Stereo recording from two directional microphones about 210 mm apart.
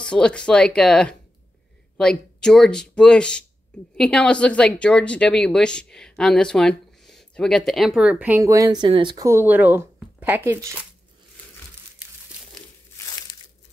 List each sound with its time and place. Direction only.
0.0 s speech: 5° left (ahead or behind); by 10.9 s 10° right (ahead or behind)